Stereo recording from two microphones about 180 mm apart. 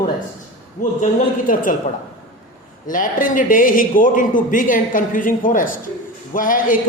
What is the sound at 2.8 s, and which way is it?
A man's voice, 50° left (ahead or behind).